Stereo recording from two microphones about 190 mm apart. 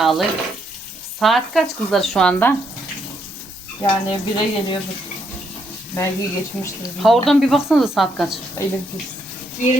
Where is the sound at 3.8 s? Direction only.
25° left (ahead or behind).